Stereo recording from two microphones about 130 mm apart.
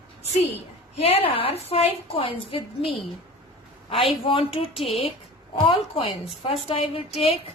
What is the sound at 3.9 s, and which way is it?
Speech, 45° left (ahead or behind).